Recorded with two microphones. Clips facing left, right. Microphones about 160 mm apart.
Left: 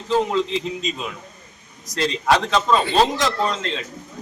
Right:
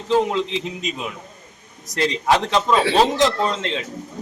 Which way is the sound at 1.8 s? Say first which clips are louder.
Right 1 dB; 20° right (ahead or behind).